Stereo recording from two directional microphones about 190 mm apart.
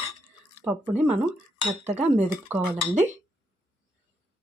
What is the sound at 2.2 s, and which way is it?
Speech, 10° right (ahead or behind).